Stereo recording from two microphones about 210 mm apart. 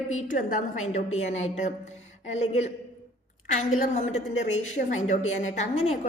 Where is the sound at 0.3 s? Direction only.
35° left (ahead or behind).